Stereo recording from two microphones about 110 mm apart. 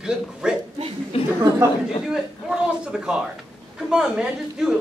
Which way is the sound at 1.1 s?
60° left (ahead or behind).